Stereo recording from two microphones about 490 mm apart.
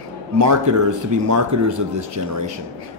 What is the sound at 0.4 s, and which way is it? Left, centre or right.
Speech, right.